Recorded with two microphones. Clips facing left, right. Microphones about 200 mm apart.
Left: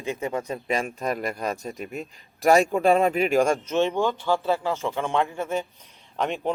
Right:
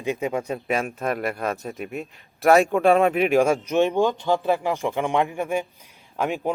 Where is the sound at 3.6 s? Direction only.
15° right (ahead or behind).